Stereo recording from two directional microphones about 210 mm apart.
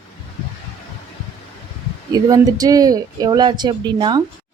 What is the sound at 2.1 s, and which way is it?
A woman's voice, 20° right (ahead or behind).